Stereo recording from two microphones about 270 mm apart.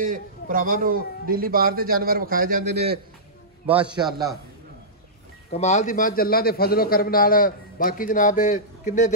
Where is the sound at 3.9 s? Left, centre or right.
Centre.